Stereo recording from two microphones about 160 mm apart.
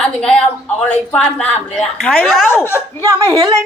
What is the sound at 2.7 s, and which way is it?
Speech, 20° right (ahead or behind).